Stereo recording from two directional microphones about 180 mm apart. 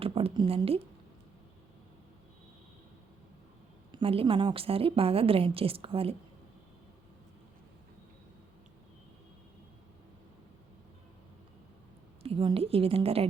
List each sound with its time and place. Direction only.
0.0 s speech: 30° right (ahead or behind)
3.9 s a woman's voice: 30° right (ahead or behind)
12.2 s a woman's voice: 30° right (ahead or behind)